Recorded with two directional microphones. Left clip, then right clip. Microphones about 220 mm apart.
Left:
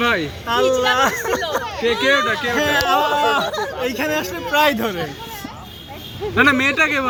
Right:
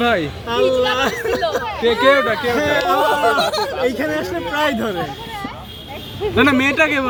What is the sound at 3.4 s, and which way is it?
Speech, 50° right (ahead or behind).